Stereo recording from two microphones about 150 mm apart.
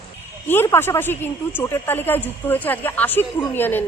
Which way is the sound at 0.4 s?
15° left (ahead or behind).